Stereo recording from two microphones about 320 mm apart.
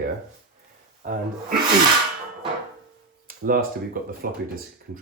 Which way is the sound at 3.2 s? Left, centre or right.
Right.